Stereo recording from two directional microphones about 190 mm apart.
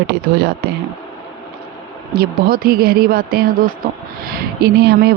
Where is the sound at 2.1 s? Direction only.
50° right (ahead or behind).